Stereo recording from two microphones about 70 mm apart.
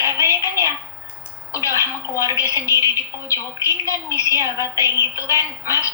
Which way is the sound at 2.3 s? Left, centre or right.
Left.